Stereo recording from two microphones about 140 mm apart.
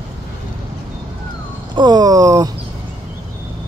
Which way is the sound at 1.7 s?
30° right (ahead or behind).